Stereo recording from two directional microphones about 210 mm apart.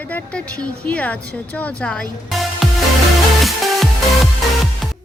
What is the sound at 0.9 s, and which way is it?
Speech, 5° left (ahead or behind).